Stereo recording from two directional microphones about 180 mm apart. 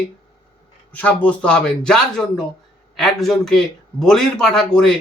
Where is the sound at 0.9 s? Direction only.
5° left (ahead or behind).